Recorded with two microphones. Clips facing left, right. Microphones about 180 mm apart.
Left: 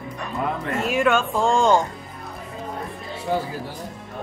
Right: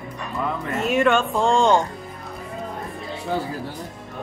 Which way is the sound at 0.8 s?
Centre (ahead or behind).